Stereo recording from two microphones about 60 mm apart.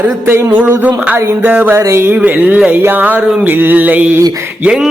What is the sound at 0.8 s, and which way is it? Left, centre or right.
Music, right.